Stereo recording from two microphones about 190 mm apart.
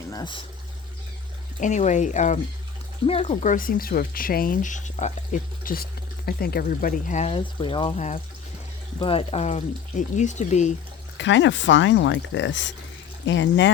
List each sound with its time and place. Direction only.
0.1 s speech: 20° left (ahead or behind)
1.6 s speech: 40° left (ahead or behind)
11.2 s speech: 75° left (ahead or behind)